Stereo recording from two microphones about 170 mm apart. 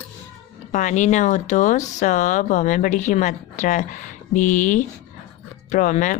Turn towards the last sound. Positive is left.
turn(degrees=45)  # may be behind; listen again after turning